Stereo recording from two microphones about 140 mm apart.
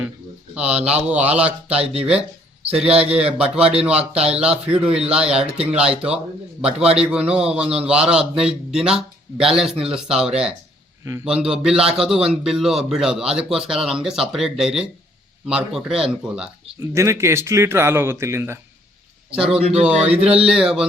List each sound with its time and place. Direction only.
0.5 s speech: 10° right (ahead or behind)
1.8 s speech: 45° right (ahead or behind)
3.0 s speech: 10° right (ahead or behind)
3.9 s speech: 45° right (ahead or behind)
4.3 s speech: 5° right (ahead or behind)
16.9 s speech: 20° right (ahead or behind)
19.3 s a man's voice: 40° right (ahead or behind)
19.8 s speech: 10° right (ahead or behind)